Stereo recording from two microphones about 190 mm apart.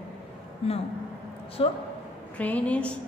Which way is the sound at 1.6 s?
30° left (ahead or behind).